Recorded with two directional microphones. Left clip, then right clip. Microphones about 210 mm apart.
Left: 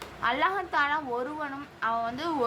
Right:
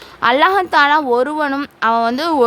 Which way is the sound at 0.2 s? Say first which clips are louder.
Right 14 dB; 50° right (ahead or behind).